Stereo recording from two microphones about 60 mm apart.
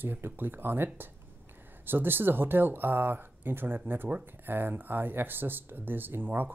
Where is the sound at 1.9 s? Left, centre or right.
Right.